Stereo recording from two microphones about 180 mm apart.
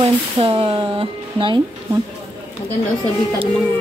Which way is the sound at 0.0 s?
30° right (ahead or behind).